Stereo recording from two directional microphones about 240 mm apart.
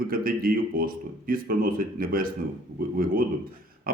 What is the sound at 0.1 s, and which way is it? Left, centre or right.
A man's voice, right.